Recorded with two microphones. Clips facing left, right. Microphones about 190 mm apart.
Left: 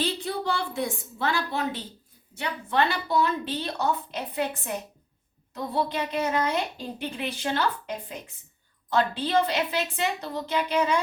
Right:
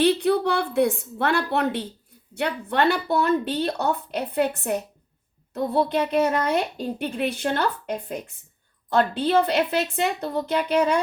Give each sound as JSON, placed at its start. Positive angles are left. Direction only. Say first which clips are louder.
{"t": 0.0, "sound": "speech", "louder": "right 9 dB", "side_deg": -65}